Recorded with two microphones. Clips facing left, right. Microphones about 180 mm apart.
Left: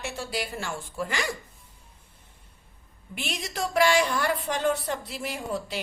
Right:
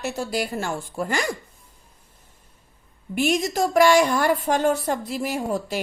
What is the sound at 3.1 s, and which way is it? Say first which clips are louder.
A woman's voice: right 11 dB; 45° right (ahead or behind).